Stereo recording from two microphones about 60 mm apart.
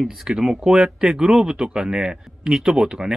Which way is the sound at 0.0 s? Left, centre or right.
Centre.